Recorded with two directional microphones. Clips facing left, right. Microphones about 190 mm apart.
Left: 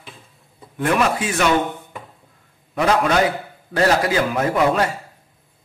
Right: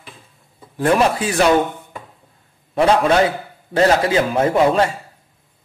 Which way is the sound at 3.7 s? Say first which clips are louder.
Right 3 dB; 25° right (ahead or behind).